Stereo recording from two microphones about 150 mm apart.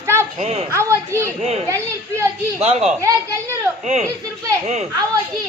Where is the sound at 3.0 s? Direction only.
20° right (ahead or behind).